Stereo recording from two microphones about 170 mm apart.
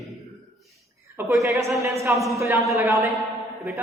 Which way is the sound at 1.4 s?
15° right (ahead or behind).